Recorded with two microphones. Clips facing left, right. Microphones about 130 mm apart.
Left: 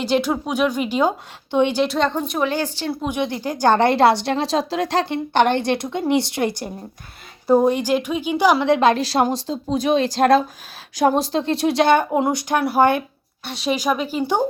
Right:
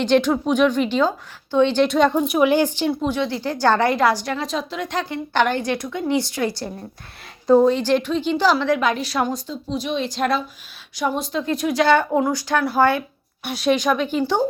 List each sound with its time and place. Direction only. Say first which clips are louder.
0.0 s a woman's voice: right 3 dB; 10° left (ahead or behind)
1.8 s a woman's voice: right 3 dB; centre (ahead or behind); by 2.9 s 15° right (ahead or behind)
3.1 s a woman's voice: even; 20° left (ahead or behind); by 5.0 s 35° left (ahead or behind)
5.0 s a woman's voice: left 3 dB; 25° left (ahead or behind)
13.4 s a woman's voice: right 3 dB; centre (ahead or behind)